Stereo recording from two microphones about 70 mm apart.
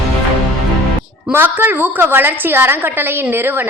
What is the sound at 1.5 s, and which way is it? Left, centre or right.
A woman's voice, right.